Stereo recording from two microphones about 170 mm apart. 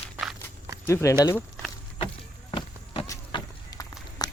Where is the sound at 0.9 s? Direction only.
15° left (ahead or behind).